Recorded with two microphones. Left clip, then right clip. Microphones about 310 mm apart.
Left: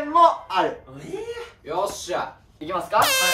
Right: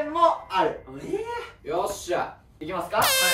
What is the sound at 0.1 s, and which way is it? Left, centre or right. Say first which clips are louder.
Music: left 6 dB; centre.